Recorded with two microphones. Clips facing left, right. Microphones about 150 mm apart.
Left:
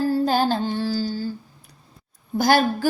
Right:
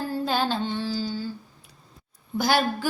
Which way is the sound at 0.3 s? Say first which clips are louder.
Left 5 dB; 45° left (ahead or behind).